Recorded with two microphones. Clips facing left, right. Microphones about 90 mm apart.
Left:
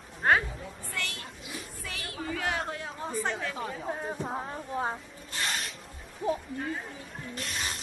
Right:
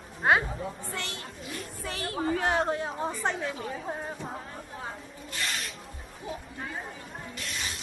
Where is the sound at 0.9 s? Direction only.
25° right (ahead or behind).